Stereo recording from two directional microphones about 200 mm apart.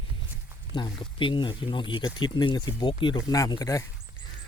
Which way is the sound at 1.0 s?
25° left (ahead or behind).